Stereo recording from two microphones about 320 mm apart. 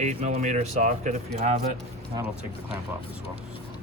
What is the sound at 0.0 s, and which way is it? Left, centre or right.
Speech, right.